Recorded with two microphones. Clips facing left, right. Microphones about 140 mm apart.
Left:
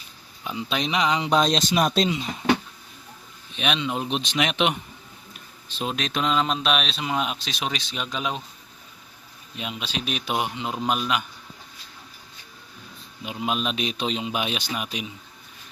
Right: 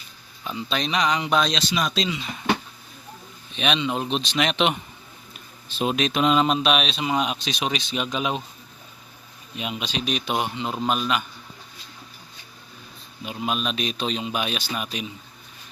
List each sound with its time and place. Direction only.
0.4 s a man's voice: 15° left (ahead or behind)
1.5 s speech: 45° left (ahead or behind)
3.5 s a man's voice: 5° left (ahead or behind)
5.6 s speech: 10° right (ahead or behind)
9.6 s a man's voice: 5° right (ahead or behind)
13.2 s a man's voice: 15° left (ahead or behind)